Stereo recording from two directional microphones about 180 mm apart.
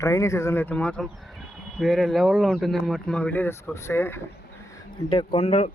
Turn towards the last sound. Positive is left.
turn(degrees=35)  # may be behind; listen again after turning